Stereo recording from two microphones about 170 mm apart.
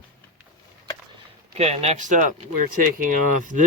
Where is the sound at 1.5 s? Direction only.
40° right (ahead or behind).